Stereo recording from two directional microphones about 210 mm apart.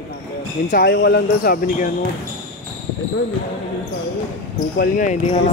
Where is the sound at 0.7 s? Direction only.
50° left (ahead or behind).